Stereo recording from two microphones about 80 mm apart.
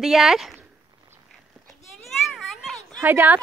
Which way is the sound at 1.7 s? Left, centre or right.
Centre.